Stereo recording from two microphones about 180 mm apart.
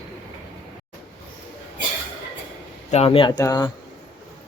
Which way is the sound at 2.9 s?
35° left (ahead or behind).